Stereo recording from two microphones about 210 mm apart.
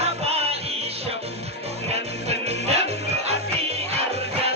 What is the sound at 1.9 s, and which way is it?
Music, 30° right (ahead or behind).